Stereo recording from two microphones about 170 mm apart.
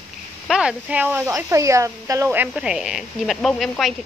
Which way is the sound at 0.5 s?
5° right (ahead or behind).